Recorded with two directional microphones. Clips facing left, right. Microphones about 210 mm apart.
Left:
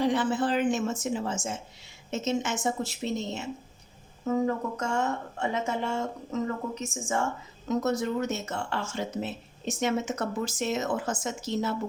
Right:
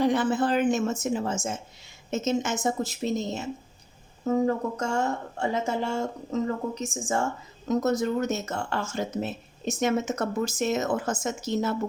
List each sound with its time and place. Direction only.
0.0 s speech: 45° right (ahead or behind)